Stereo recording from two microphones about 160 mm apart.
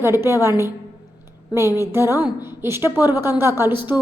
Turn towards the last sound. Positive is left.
turn(degrees=-15)  # may be behind; listen again after turning